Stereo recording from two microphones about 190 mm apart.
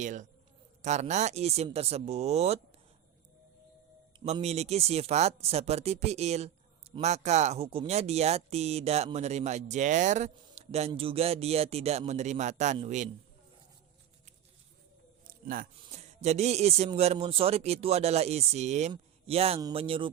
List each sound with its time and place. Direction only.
0.0 s speech: 40° right (ahead or behind)
4.2 s speech: 35° right (ahead or behind)
15.2 s a sound: 50° right (ahead or behind)
15.9 s speech: 35° right (ahead or behind)